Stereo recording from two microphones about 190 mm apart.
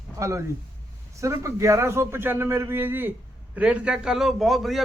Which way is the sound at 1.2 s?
15° right (ahead or behind).